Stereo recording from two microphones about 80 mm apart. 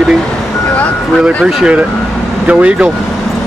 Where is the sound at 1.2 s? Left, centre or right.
Centre.